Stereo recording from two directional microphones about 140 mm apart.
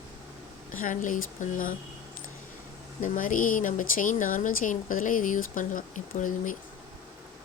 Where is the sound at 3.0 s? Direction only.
70° left (ahead or behind).